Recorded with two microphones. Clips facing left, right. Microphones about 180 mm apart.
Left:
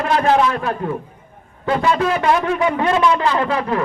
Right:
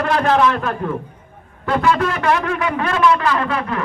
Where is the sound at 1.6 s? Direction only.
20° left (ahead or behind).